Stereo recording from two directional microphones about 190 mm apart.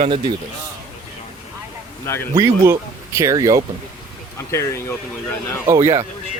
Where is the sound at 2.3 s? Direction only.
20° right (ahead or behind).